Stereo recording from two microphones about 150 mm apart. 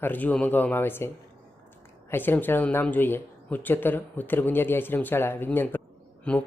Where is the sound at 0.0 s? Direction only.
10° left (ahead or behind).